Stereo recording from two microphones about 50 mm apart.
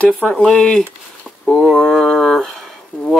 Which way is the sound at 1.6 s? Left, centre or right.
Centre.